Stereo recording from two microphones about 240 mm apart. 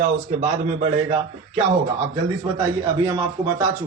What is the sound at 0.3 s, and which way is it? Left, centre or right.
Speech, right.